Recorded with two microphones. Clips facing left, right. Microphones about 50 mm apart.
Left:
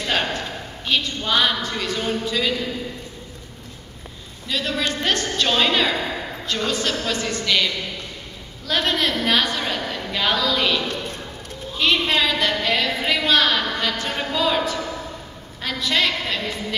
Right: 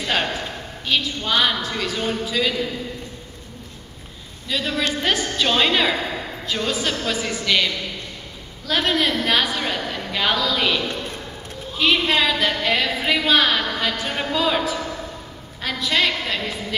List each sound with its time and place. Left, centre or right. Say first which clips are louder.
0.0 s a sound: even; centre
0.8 s a woman's voice: even; centre
4.5 s a woman's voice: right 1 dB; centre